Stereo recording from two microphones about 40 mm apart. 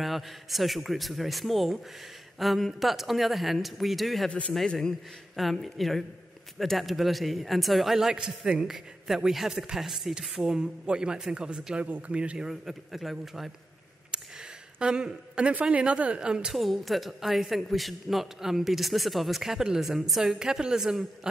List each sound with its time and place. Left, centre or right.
0.0 s a woman's voice: centre
4.3 s speech: left
5.3 s a woman's voice: centre
10.4 s speech: right
12.4 s a woman's voice: centre
14.1 s a sound: centre
14.8 s speech: right
16.5 s a woman's voice: centre